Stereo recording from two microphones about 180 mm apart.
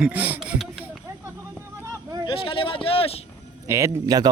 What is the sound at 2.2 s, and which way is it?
Speech, 30° left (ahead or behind).